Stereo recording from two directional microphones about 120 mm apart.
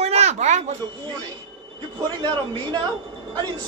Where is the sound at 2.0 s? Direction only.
35° right (ahead or behind).